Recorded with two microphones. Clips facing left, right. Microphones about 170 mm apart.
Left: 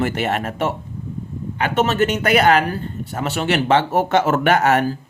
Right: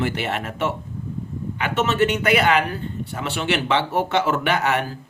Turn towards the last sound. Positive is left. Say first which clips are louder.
# left 6 dB
turn(degrees=45)  # may be behind; listen again after turning